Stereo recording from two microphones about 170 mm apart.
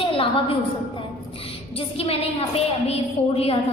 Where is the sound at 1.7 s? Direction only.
35° left (ahead or behind).